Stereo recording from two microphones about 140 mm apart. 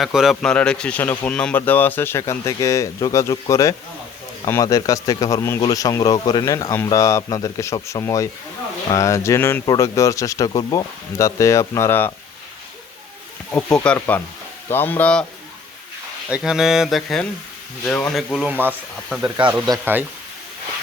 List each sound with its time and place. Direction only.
0.0 s speech: centre (ahead or behind); by 12.1 s 15° left (ahead or behind)
13.8 s speech: 10° left (ahead or behind)
16.3 s speech: 5° right (ahead or behind)
19.8 s speech: 15° right (ahead or behind)